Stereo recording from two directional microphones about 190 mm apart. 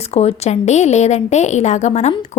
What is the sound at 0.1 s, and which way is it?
A woman's voice, 35° left (ahead or behind).